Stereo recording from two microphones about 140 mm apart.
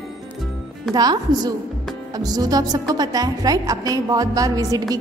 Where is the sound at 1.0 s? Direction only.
30° right (ahead or behind).